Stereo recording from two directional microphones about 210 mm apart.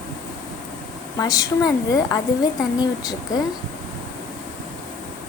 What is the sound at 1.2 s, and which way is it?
Speech, 15° left (ahead or behind).